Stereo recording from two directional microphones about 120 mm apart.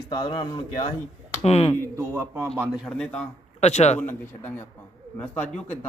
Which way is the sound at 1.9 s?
25° right (ahead or behind).